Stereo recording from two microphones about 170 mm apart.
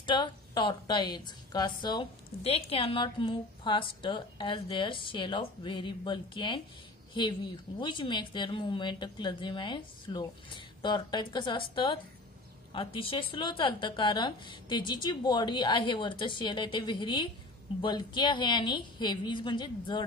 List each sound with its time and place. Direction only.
0.0 s a woman's voice: 25° left (ahead or behind)
7.8 s a woman's voice: 30° left (ahead or behind)